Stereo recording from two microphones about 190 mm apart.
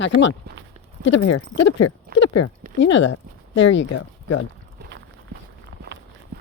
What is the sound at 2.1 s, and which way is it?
Clip-clop, 50° right (ahead or behind).